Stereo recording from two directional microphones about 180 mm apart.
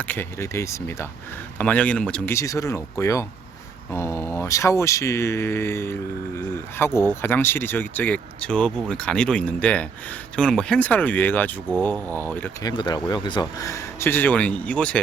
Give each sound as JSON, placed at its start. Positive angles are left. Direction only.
{"t": 0.0, "sound": "speech", "side_deg": 10}
{"t": 12.6, "sound": "speech", "side_deg": 25}